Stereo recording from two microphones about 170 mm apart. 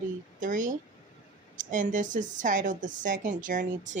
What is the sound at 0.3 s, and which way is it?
A woman's voice, 50° right (ahead or behind).